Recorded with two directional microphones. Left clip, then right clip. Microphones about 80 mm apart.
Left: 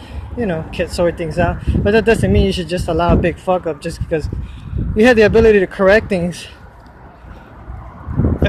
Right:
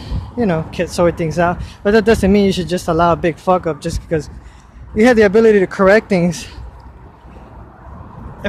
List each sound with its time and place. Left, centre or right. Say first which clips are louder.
0.3 s speech: right 2 dB; right
3.6 s speech: right 1 dB; right
4.9 s a man's voice: even; right
5.6 s speech: right 1 dB; right